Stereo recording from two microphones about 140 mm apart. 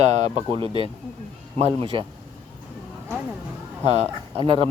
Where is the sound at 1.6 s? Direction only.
40° right (ahead or behind).